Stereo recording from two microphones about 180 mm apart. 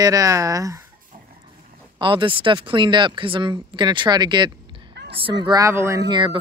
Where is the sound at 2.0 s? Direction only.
25° right (ahead or behind).